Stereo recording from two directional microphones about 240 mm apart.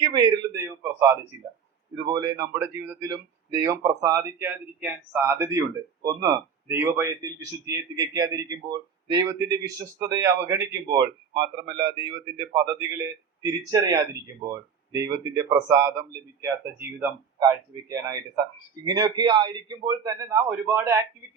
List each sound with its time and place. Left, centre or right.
0.0 s speech: centre
13.4 s speech: centre